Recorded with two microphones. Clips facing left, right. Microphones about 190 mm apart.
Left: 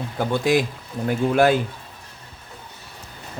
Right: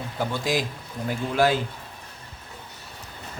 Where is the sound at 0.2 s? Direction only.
55° left (ahead or behind).